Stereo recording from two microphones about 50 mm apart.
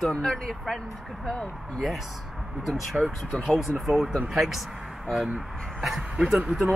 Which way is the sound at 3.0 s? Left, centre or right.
Right.